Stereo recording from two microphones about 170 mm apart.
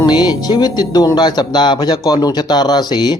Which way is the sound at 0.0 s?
25° left (ahead or behind).